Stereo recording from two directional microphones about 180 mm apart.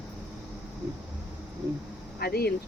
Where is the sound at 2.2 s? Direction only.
60° left (ahead or behind).